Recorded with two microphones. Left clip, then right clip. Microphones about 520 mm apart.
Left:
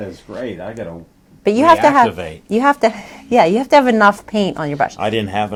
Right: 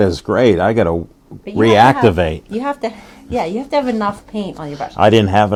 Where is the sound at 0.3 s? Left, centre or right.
Right.